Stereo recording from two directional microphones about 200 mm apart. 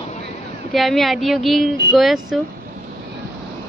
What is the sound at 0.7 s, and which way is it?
Speech, centre (ahead or behind).